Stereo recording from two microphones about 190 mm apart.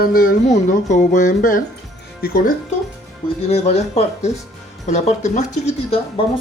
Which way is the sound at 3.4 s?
35° left (ahead or behind).